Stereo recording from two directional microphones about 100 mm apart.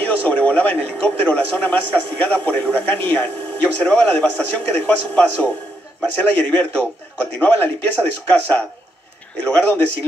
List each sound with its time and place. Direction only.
0.0 s a man's voice: 20° left (ahead or behind)